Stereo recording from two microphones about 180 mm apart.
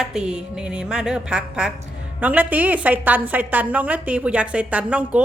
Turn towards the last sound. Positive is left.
turn(degrees=-10)  # may be behind; listen again after turning